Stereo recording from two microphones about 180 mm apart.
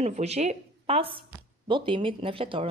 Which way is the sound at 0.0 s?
35° right (ahead or behind).